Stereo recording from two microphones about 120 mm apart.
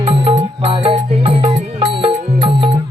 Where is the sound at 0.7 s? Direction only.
50° right (ahead or behind).